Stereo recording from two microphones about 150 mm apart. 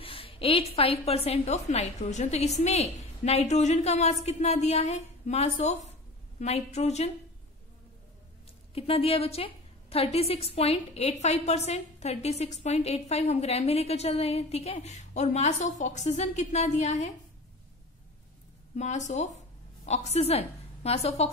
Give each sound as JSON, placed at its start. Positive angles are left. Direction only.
{"t": 0.0, "sound": "a woman's voice", "side_deg": 40}
{"t": 8.7, "sound": "a woman's voice", "side_deg": 40}
{"t": 18.8, "sound": "a woman's voice", "side_deg": 50}